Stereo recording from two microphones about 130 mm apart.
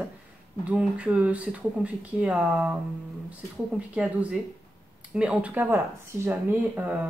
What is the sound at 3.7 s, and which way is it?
Speech, 10° right (ahead or behind).